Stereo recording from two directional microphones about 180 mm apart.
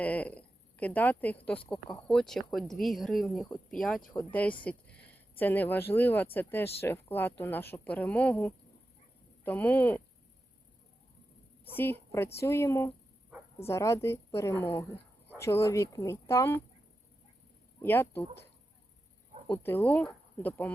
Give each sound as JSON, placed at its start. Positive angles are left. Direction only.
{"t": 0.0, "sound": "a woman's voice", "side_deg": 10}
{"t": 11.7, "sound": "speech", "side_deg": 10}
{"t": 17.7, "sound": "speech", "side_deg": 15}
{"t": 19.5, "sound": "speech", "side_deg": 10}